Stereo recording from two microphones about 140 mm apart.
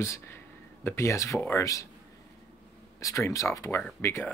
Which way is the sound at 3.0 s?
20° left (ahead or behind).